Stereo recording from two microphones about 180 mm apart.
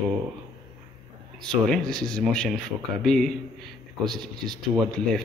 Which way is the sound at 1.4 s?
5° left (ahead or behind).